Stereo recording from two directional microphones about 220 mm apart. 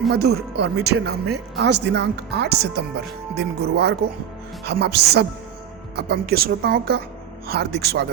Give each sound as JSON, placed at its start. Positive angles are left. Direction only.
{"t": 0.1, "sound": "speech", "side_deg": -45}
{"t": 0.9, "sound": "speech", "side_deg": -90}
{"t": 1.7, "sound": "speech", "side_deg": -50}